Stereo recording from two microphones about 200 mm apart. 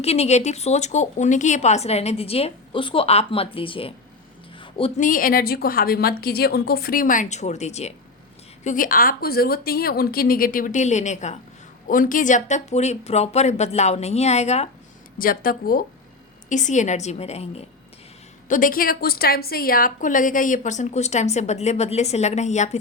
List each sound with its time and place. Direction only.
0.0 s a woman's voice: 30° left (ahead or behind)
4.5 s a sound: 25° left (ahead or behind)
4.9 s a woman's voice: 40° left (ahead or behind)
15.2 s a woman's voice: 45° left (ahead or behind)
18.4 s a woman's voice: 40° left (ahead or behind)